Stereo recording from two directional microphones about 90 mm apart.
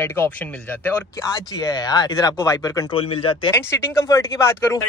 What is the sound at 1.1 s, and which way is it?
Speech, 40° left (ahead or behind).